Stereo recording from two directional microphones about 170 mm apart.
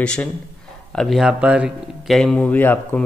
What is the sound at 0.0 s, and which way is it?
A man's voice, 5° left (ahead or behind).